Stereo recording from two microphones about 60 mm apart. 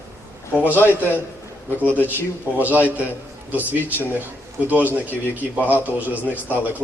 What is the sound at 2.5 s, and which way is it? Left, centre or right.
A man's voice, right.